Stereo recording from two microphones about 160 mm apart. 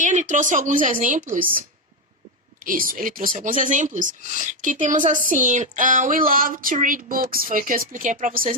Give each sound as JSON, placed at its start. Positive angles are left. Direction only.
{"t": 0.0, "sound": "a woman's voice", "side_deg": -50}